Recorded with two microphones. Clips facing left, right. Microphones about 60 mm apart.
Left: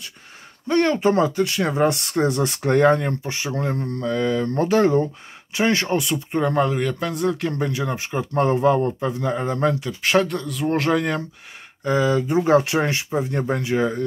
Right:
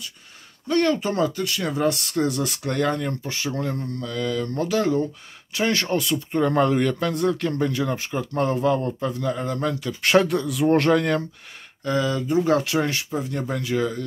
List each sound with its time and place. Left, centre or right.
0.7 s speech: left
6.4 s speech: centre; by 9.8 s left
10.0 s speech: centre
11.8 s speech: left